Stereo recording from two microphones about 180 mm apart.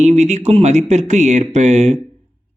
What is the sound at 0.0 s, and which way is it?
Speech, 40° right (ahead or behind).